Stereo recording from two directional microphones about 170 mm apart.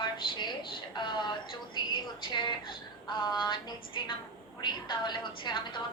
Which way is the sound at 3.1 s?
25° left (ahead or behind).